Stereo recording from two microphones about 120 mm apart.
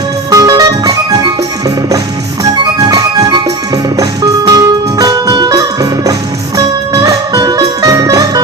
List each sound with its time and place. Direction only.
0.3 s music: 30° right (ahead or behind)